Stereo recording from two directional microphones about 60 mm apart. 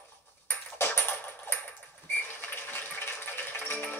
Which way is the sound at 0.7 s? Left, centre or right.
Left.